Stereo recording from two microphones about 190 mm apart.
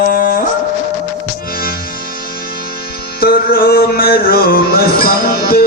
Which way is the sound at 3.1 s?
50° left (ahead or behind).